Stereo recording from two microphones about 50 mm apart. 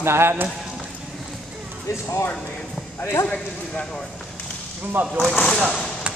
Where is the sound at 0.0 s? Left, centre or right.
Right.